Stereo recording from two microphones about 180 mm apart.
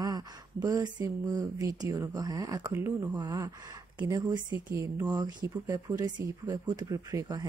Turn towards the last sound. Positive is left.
turn(degrees=-25)  # may be behind; listen again after turning